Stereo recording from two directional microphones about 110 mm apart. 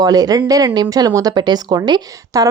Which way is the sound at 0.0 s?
35° right (ahead or behind).